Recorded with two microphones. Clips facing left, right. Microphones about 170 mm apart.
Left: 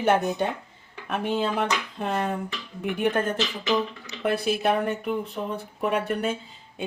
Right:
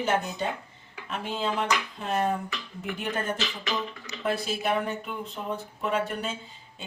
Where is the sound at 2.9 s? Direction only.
60° left (ahead or behind).